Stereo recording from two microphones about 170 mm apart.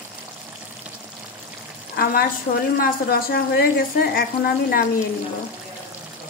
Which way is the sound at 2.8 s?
60° left (ahead or behind).